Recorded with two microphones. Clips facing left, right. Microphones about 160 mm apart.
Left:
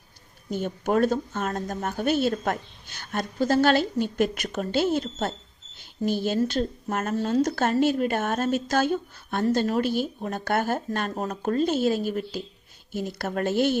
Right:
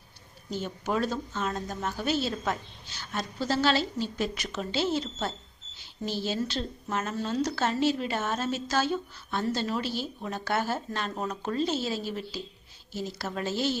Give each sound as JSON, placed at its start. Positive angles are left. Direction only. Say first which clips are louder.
{"t": 0.5, "sound": "a woman's voice", "louder": "left 6 dB", "side_deg": 55}